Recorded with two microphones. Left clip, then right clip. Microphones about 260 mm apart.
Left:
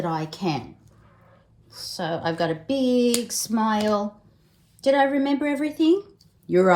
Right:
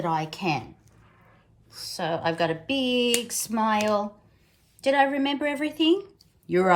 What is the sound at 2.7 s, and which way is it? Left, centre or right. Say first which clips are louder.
Speech: left 4 dB; centre.